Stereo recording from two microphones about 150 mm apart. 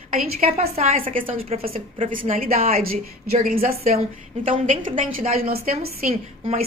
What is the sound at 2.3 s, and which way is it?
A woman's voice, 75° right (ahead or behind).